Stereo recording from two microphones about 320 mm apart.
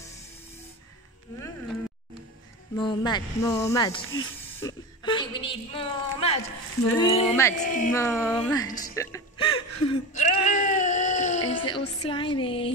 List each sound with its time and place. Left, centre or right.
2.7 s speech: centre
7.5 s a woman's voice: left
7.9 s a woman's voice: centre
10.1 s a sound: left
11.4 s speech: centre